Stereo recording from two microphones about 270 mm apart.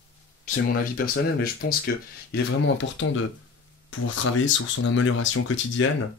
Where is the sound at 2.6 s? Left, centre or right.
Left.